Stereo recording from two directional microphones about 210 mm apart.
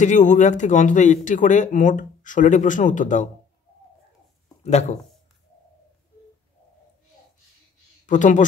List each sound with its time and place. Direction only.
0.0 s speech: 35° left (ahead or behind)
4.6 s speech: 30° left (ahead or behind)
8.1 s speech: 35° left (ahead or behind)